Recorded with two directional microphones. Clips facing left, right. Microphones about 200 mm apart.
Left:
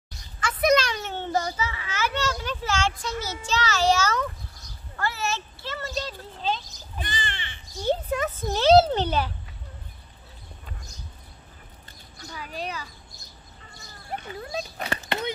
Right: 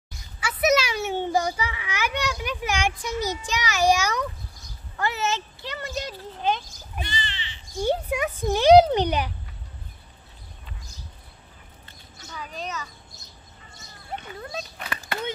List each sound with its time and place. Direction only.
0.4 s children playing: 10° right (ahead or behind)
3.4 s a child's voice: 15° right (ahead or behind)
7.0 s crow: 50° left (ahead or behind)
7.8 s a child's voice: 10° right (ahead or behind)
14.8 s a sound: 30° left (ahead or behind)